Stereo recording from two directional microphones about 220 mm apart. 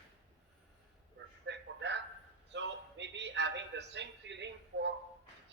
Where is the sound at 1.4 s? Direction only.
55° right (ahead or behind).